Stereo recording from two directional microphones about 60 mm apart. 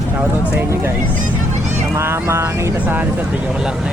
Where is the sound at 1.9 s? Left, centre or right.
Right.